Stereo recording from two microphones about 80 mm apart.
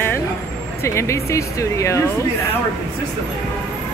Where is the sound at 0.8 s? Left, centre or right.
Left.